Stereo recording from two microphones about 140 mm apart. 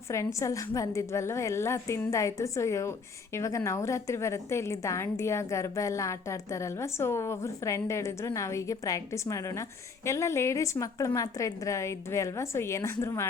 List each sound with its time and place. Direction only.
0.1 s a woman's voice: 20° left (ahead or behind)